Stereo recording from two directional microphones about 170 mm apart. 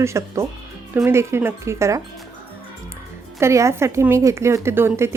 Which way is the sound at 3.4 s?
15° right (ahead or behind).